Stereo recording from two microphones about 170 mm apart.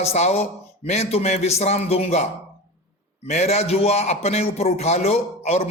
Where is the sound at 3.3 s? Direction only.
40° left (ahead or behind).